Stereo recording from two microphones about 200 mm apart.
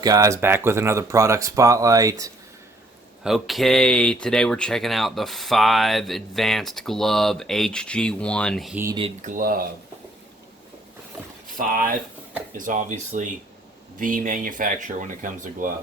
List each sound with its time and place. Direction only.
0.0 s speech: 15° right (ahead or behind)
3.2 s speech: centre (ahead or behind)
9.0 s speech: 35° right (ahead or behind)
11.5 s speech: 45° right (ahead or behind)